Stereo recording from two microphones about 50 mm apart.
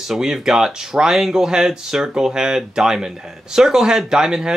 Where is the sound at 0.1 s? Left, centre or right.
Centre.